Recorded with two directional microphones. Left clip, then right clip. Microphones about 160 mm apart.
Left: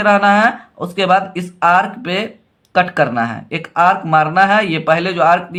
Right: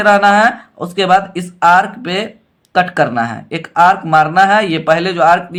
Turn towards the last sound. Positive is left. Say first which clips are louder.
# right 2 dB
turn(degrees=-15)  # may be behind; listen again after turning